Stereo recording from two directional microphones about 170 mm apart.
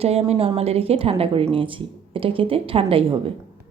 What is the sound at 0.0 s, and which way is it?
A woman's voice, 35° right (ahead or behind).